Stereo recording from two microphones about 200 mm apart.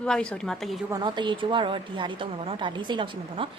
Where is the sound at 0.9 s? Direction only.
20° right (ahead or behind).